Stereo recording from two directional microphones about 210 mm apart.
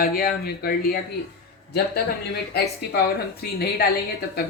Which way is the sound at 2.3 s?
50° left (ahead or behind).